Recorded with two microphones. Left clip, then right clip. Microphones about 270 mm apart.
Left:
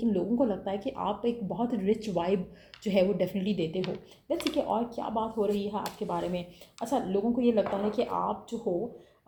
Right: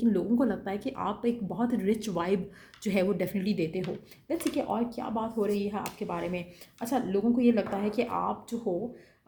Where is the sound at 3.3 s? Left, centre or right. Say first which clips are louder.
Even; right.